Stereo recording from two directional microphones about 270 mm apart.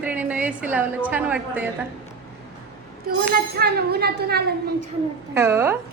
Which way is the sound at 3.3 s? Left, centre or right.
Right.